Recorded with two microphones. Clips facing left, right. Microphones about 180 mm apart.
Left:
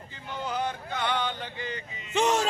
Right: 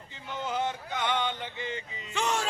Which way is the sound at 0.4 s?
20° right (ahead or behind).